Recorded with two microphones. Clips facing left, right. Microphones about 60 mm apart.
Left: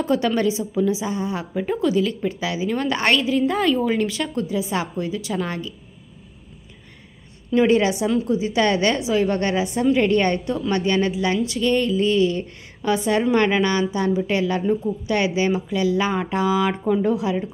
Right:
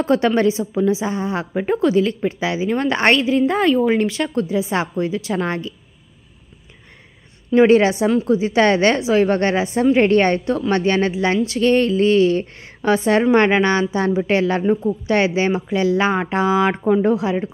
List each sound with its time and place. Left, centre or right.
0.0 s a woman's voice: right
7.5 s a woman's voice: right